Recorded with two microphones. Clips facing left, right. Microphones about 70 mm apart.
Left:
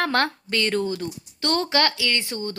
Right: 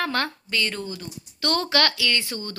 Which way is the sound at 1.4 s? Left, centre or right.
Left.